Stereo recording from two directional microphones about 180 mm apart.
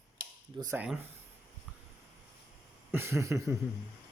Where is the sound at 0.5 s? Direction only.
20° right (ahead or behind).